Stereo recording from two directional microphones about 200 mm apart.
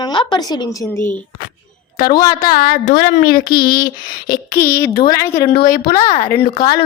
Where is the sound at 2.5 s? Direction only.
45° left (ahead or behind).